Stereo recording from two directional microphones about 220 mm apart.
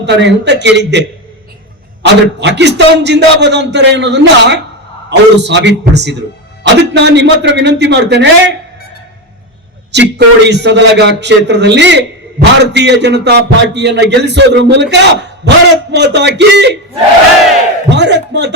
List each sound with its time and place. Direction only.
0.0 s a man's voice: 50° right (ahead or behind)
9.9 s a man's voice: 50° right (ahead or behind)
17.8 s a man's voice: 50° right (ahead or behind)